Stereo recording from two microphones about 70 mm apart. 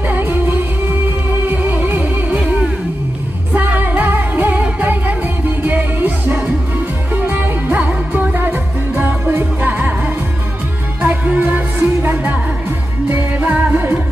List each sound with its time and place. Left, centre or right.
0.1 s music: right
3.5 s music: right